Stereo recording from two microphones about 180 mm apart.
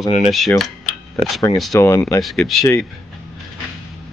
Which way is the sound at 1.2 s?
15° left (ahead or behind).